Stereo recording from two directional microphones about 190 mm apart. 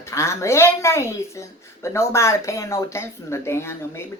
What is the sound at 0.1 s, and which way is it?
Speech, 15° left (ahead or behind).